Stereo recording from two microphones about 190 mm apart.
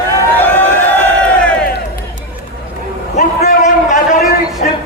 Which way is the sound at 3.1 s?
50° left (ahead or behind).